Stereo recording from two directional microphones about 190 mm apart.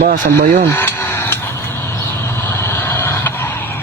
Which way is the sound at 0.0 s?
50° right (ahead or behind).